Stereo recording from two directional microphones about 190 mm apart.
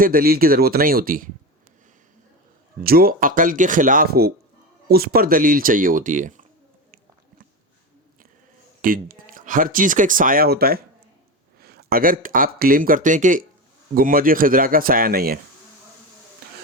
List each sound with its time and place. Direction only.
0.0 s speech: 50° right (ahead or behind)
2.8 s speech: 50° right (ahead or behind)
8.8 s speech: 45° right (ahead or behind)